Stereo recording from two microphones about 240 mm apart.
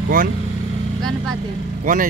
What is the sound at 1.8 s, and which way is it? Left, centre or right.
Speech, right.